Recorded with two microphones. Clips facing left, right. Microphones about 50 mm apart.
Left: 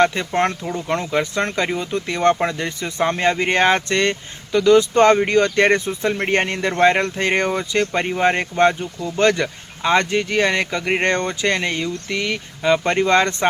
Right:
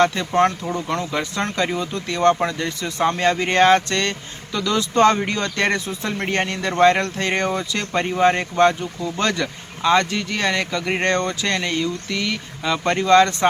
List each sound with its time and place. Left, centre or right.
0.0 s speech: left